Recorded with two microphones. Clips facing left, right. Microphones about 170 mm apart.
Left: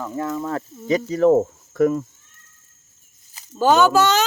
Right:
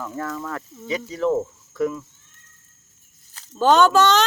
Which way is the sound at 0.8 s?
45° left (ahead or behind).